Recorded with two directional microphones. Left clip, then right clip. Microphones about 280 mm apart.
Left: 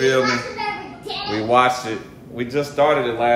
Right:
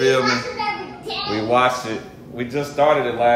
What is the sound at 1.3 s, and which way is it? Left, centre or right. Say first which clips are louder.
Speech: left 1 dB; centre.